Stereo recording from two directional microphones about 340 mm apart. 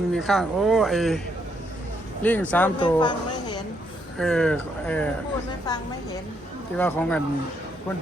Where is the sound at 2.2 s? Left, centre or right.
Centre.